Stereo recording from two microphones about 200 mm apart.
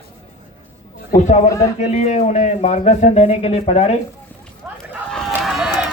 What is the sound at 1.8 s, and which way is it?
Speech, 35° left (ahead or behind).